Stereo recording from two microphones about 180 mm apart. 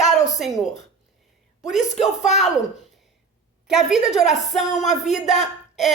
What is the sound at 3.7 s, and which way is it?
A woman's voice, centre (ahead or behind).